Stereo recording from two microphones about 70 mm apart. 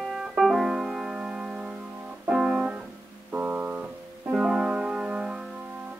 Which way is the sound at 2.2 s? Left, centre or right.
Centre.